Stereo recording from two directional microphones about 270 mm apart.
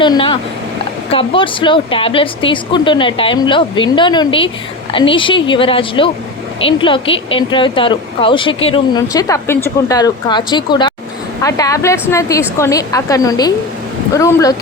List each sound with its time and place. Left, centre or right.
0.0 s speech: centre